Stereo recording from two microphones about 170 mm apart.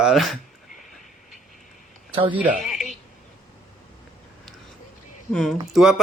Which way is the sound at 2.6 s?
Centre (ahead or behind).